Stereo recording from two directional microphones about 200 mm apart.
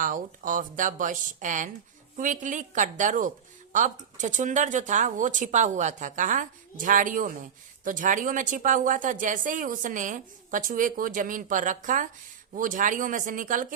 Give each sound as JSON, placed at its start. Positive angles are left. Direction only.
{"t": 0.0, "sound": "speech", "side_deg": -40}